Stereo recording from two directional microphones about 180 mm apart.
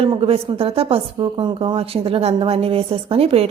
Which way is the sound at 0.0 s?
30° right (ahead or behind).